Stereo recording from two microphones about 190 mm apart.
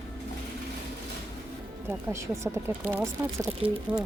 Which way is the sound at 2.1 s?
15° right (ahead or behind).